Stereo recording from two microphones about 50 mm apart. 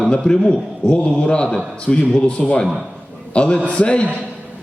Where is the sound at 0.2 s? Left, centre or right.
Centre.